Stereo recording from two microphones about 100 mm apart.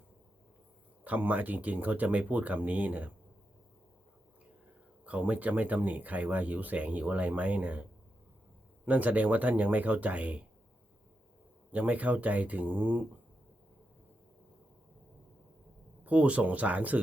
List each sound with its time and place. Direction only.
1.0 s speech: 15° right (ahead or behind)
5.0 s speech: 15° right (ahead or behind)
11.7 s speech: 15° right (ahead or behind)
16.0 s speech: 15° right (ahead or behind)